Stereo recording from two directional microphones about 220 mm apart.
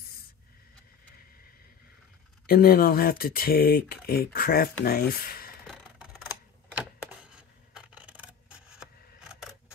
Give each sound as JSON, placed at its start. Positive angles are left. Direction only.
{"t": 2.4, "sound": "speech", "side_deg": 45}
{"t": 5.7, "sound": "a sound", "side_deg": 0}
{"t": 9.3, "sound": "camera", "side_deg": -5}